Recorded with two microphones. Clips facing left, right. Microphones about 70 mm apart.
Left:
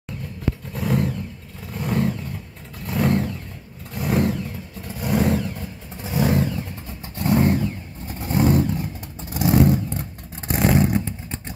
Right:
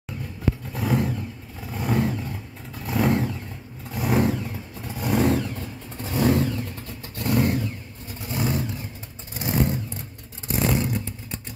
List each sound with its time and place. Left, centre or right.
0.7 s vehicle: centre
7.2 s vehicle: left
8.2 s vehicle: left
9.3 s vehicle: left
10.5 s vehicle: left